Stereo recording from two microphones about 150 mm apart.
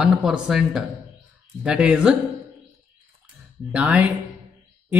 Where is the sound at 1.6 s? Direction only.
5° right (ahead or behind).